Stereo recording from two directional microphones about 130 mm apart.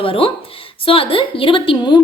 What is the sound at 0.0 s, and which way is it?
A woman's voice, 45° left (ahead or behind).